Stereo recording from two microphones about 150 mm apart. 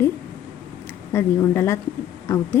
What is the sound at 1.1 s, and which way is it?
Speech, 15° left (ahead or behind).